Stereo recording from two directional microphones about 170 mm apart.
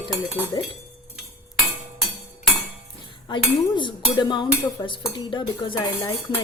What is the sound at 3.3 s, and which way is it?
Dishes, 30° left (ahead or behind).